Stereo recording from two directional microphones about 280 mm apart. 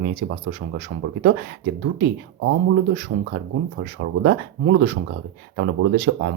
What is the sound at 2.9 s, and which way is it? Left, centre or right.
Speech, right.